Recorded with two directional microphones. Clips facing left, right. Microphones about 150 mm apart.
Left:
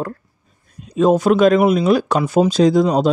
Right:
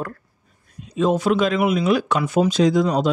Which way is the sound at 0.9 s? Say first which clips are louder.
Left 5 dB; 45° left (ahead or behind).